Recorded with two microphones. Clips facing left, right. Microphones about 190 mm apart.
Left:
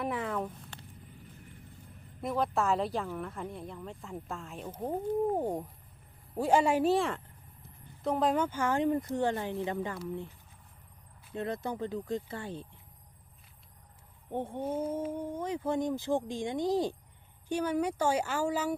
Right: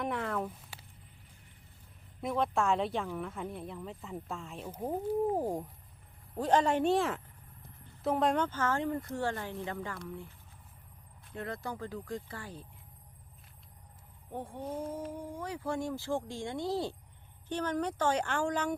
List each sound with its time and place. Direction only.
0.0 s speech: centre (ahead or behind)
2.2 s speech: centre (ahead or behind); by 10.0 s 20° left (ahead or behind)
11.3 s speech: 20° left (ahead or behind)
14.3 s speech: 25° left (ahead or behind); by 18.7 s 5° left (ahead or behind)